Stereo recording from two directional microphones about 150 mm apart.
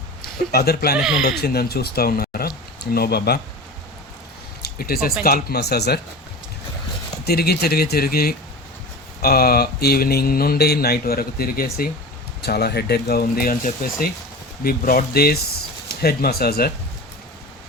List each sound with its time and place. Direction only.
0.5 s speech: 90° left
0.9 s speech: 5° right (ahead or behind)
1.2 s speech: 90° left
4.6 s speech: 90° left
7.3 s speech: 90° left
12.4 s speech: 90° left